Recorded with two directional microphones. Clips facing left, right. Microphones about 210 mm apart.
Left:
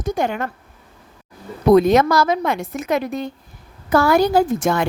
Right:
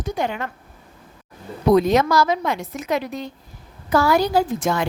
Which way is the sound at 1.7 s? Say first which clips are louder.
Left 3 dB; 55° left (ahead or behind).